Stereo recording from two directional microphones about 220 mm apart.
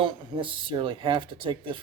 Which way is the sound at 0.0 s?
25° right (ahead or behind).